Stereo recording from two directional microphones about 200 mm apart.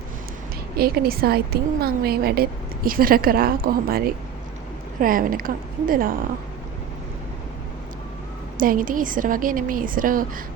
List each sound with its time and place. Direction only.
0.8 s a woman's voice: 50° right (ahead or behind)
8.5 s a woman's voice: 45° right (ahead or behind)